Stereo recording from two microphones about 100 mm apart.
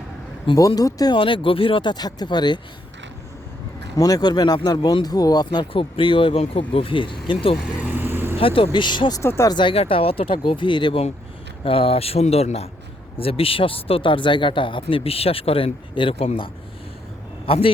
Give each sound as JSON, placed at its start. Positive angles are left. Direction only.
{"t": 0.5, "sound": "speech", "side_deg": 55}
{"t": 0.8, "sound": "speech", "side_deg": 40}
{"t": 1.1, "sound": "speech", "side_deg": 60}
{"t": 3.9, "sound": "speech", "side_deg": 40}
{"t": 5.7, "sound": "speech", "side_deg": 60}
{"t": 7.8, "sound": "vehicle", "side_deg": -15}
{"t": 8.4, "sound": "speech", "side_deg": 65}
{"t": 9.2, "sound": "speech", "side_deg": 25}
{"t": 9.5, "sound": "speech", "side_deg": 50}
{"t": 9.7, "sound": "speech", "side_deg": 70}
{"t": 11.6, "sound": "speech", "side_deg": 65}
{"t": 13.1, "sound": "a man's voice", "side_deg": 70}